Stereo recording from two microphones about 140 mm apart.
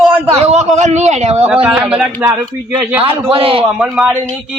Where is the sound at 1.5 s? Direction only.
10° right (ahead or behind).